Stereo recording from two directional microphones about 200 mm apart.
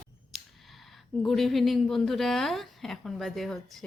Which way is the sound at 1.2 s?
Centre (ahead or behind).